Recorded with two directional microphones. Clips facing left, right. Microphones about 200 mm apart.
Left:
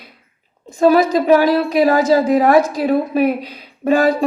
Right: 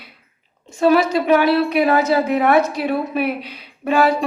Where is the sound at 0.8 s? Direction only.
35° left (ahead or behind).